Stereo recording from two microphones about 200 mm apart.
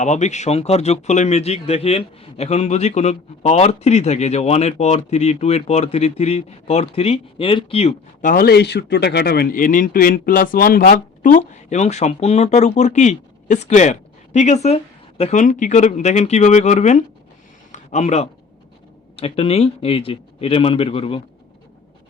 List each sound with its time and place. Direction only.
0.0 s speech: 35° left (ahead or behind)
8.3 s speech: 50° left (ahead or behind)
17.7 s a sound: 35° left (ahead or behind)
19.1 s a man's voice: 30° left (ahead or behind)